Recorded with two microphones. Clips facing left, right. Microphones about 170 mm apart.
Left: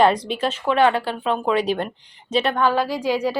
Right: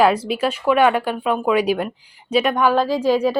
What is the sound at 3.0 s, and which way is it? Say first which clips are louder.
Speech: right 4 dB; 10° left (ahead or behind).